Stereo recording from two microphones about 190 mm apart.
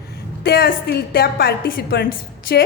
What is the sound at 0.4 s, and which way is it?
A woman's voice, 55° left (ahead or behind).